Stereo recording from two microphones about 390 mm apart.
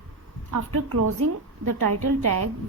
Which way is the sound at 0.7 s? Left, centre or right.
Right.